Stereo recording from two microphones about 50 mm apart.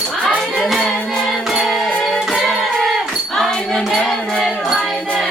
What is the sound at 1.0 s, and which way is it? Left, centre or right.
Music, centre.